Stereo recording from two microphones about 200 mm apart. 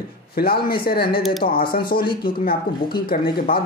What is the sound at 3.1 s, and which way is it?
Speech, 45° left (ahead or behind).